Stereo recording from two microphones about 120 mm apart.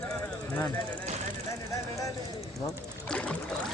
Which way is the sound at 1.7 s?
25° left (ahead or behind).